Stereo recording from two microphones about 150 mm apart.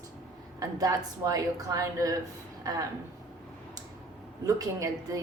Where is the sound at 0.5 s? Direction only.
25° right (ahead or behind).